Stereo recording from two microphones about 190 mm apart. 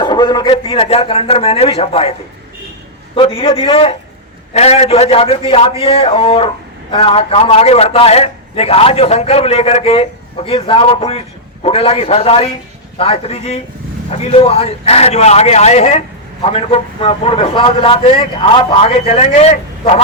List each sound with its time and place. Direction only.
0.0 s a man's voice: 25° left (ahead or behind)
3.2 s a man's voice: 30° left (ahead or behind)